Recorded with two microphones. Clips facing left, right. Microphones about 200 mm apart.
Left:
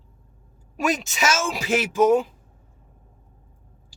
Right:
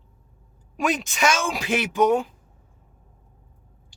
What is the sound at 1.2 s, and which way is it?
Speech, 5° left (ahead or behind).